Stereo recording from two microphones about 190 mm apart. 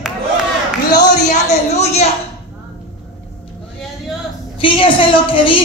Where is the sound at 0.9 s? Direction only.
40° left (ahead or behind).